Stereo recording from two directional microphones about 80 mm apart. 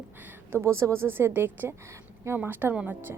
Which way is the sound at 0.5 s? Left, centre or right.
Right.